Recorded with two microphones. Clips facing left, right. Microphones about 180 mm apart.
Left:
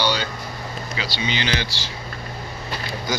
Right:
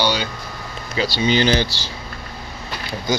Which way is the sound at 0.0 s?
15° right (ahead or behind).